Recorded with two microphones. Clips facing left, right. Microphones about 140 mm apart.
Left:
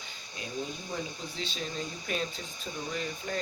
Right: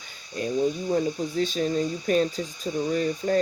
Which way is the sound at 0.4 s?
45° right (ahead or behind).